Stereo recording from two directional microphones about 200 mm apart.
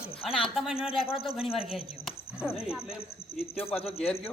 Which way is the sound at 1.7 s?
Centre (ahead or behind).